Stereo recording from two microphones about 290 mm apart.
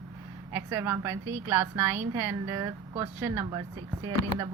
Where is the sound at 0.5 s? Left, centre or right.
Centre.